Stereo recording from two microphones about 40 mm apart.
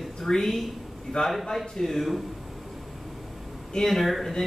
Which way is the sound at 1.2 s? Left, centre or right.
Left.